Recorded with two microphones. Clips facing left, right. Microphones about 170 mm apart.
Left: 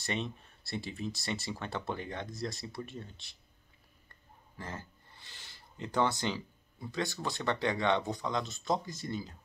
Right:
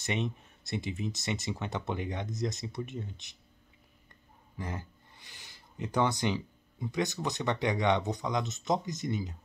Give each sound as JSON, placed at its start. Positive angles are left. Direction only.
{"t": 0.0, "sound": "speech", "side_deg": -20}
{"t": 4.6, "sound": "speech", "side_deg": -15}